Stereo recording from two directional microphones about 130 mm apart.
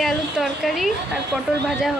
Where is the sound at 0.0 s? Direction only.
Centre (ahead or behind).